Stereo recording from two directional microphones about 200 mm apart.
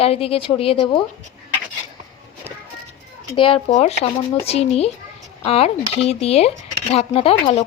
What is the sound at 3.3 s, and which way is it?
A woman's voice, 25° left (ahead or behind).